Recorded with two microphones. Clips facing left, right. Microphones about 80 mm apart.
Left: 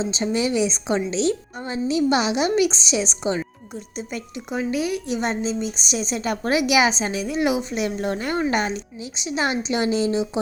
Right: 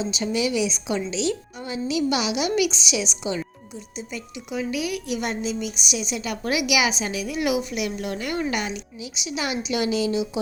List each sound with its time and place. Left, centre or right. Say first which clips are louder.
0.0 s a woman's voice: left 2 dB; left